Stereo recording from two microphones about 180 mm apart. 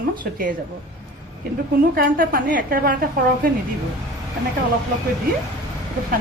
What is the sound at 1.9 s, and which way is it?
A woman's voice, 50° right (ahead or behind).